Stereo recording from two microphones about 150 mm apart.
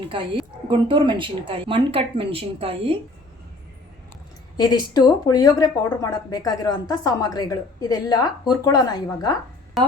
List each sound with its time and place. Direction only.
0.1 s speech: 35° right (ahead or behind)
4.5 s speech: 25° left (ahead or behind)
9.8 s speech: centre (ahead or behind)